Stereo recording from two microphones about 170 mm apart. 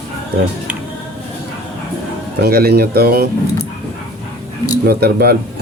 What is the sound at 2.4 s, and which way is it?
Speech, 65° right (ahead or behind).